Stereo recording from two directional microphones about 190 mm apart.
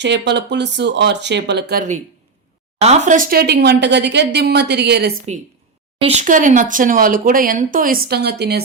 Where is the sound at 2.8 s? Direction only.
35° right (ahead or behind); by 5.2 s 60° right (ahead or behind).